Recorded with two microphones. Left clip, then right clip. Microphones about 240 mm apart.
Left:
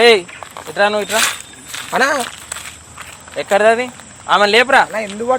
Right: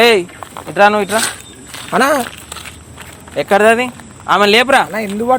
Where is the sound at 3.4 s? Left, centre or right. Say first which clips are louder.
Right 2 dB; right.